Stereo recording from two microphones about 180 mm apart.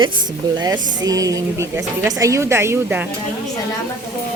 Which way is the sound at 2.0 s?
20° right (ahead or behind).